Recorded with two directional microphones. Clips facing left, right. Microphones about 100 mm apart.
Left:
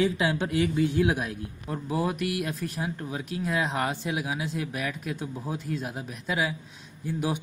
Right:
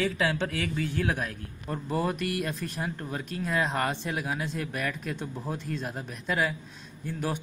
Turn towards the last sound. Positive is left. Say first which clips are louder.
# left 3 dB
turn(degrees=10)  # may be behind; listen again after turning